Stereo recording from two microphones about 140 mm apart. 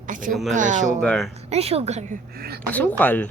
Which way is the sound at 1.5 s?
45° right (ahead or behind).